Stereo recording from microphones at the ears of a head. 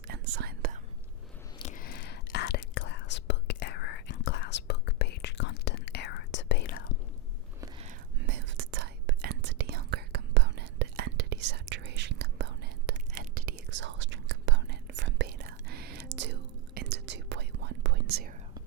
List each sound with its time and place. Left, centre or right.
0.1 s whispering: right
1.6 s whispering: left
7.9 s whispering: right